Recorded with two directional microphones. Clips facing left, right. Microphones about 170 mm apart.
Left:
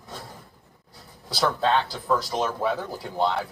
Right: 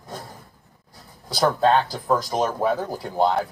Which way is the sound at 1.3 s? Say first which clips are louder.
Right 4 dB; 45° right (ahead or behind).